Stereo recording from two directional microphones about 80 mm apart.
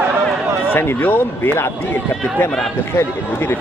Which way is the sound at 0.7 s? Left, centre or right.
Left.